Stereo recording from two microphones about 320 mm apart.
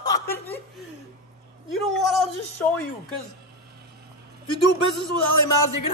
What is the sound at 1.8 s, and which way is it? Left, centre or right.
Speech, centre.